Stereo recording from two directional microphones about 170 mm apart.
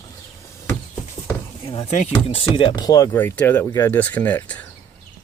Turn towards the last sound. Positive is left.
turn(degrees=10)  # may be behind; listen again after turning